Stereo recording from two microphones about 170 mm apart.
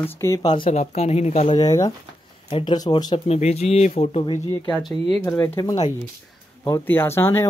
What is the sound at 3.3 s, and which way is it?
Speech, 40° left (ahead or behind).